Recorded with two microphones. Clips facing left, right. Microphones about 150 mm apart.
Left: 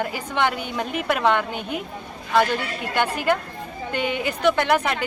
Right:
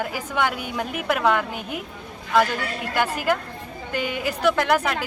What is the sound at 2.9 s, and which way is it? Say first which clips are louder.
Speech: left 1 dB; 5° right (ahead or behind).